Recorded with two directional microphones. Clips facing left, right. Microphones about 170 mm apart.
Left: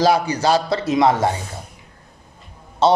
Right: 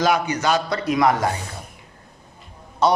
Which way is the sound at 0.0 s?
35° left (ahead or behind).